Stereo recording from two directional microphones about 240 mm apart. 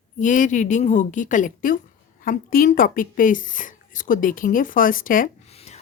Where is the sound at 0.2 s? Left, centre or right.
Left.